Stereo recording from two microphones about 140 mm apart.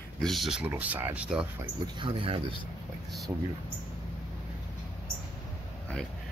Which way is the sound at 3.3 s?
10° right (ahead or behind).